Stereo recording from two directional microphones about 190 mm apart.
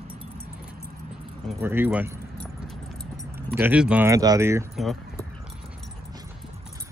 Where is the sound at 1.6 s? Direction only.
10° right (ahead or behind).